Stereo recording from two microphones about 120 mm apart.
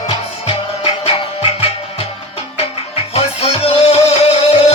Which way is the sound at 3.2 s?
55° left (ahead or behind).